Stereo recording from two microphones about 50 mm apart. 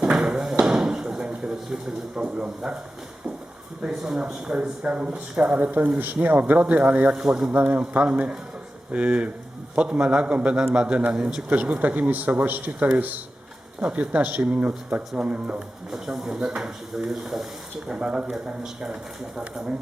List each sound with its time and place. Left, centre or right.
0.0 s a sound: centre
0.6 s chop: centre
3.8 s a man's voice: centre
7.2 s speech: centre
7.5 s a man's voice: right
13.8 s a man's voice: right
15.5 s a man's voice: centre